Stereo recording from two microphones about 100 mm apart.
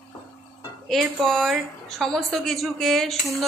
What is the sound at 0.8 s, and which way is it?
A woman's voice, 5° left (ahead or behind).